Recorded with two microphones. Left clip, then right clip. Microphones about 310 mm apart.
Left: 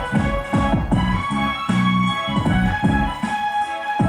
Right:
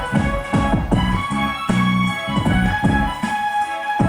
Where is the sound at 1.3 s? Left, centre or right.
Centre.